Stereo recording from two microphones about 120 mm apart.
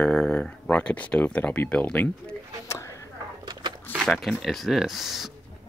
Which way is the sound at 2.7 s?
25° left (ahead or behind).